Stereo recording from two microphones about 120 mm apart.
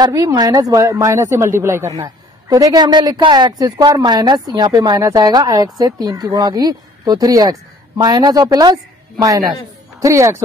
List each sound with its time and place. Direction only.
0.0 s a woman's voice: 30° right (ahead or behind)
10.0 s a woman's voice: 25° right (ahead or behind)